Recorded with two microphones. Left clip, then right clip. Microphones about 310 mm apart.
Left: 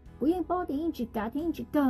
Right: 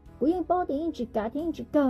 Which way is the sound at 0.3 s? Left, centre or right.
Centre.